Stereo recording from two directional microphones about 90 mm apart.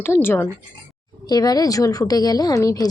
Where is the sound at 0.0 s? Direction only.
25° left (ahead or behind).